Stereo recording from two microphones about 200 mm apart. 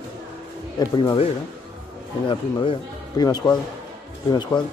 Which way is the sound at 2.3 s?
25° left (ahead or behind).